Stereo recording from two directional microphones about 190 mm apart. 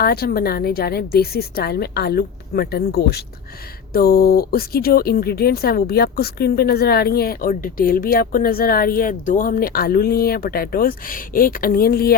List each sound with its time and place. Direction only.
0.0 s a woman's voice: 55° left (ahead or behind)